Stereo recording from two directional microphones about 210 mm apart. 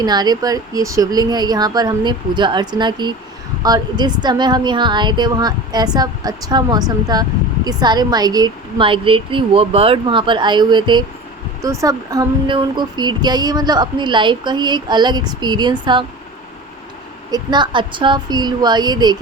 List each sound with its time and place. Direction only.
0.0 s speech: 20° right (ahead or behind)
17.3 s speech: 20° right (ahead or behind)